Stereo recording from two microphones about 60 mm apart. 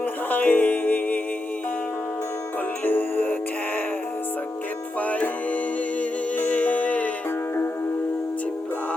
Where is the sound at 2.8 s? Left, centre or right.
Left.